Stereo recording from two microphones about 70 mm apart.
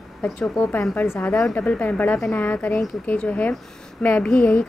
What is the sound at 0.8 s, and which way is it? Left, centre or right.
Speech, left.